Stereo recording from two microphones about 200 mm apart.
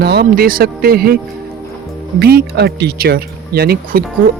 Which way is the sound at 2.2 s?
50° right (ahead or behind).